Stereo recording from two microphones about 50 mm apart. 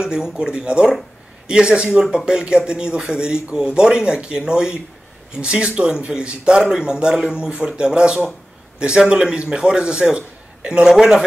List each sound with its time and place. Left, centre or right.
0.0 s a man's voice: centre